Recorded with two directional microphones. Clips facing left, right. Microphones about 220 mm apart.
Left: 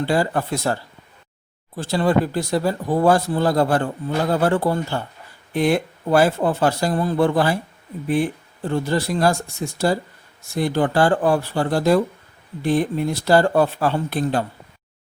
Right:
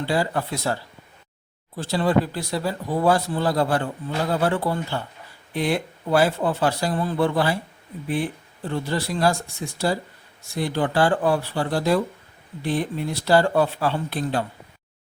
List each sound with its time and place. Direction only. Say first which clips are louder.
0.0 s speech: left 3 dB; 50° left (ahead or behind)